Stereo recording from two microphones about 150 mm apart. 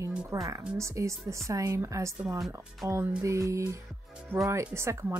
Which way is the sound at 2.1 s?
5° right (ahead or behind).